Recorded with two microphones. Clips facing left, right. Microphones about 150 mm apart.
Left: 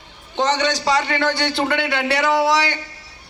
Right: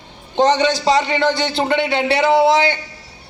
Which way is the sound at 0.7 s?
25° right (ahead or behind).